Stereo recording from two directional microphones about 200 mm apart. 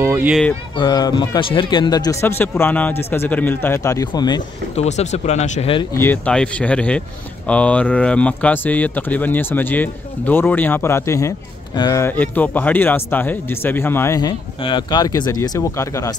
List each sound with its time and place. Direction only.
0.0 s speech: 10° right (ahead or behind)
0.7 s speech: 20° left (ahead or behind)
4.7 s speech: 35° left (ahead or behind)
5.9 s speech: 10° left (ahead or behind)